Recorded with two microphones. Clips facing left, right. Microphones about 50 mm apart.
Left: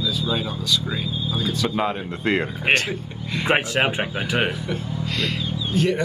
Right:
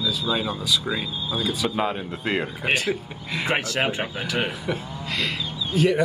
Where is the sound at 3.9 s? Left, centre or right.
Centre.